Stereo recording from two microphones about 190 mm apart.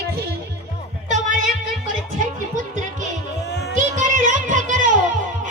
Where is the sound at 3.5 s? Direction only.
60° left (ahead or behind).